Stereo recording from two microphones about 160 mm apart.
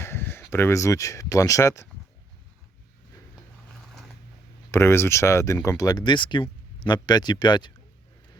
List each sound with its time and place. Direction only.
0.0 s speech: 15° left (ahead or behind)
4.7 s speech: 15° left (ahead or behind)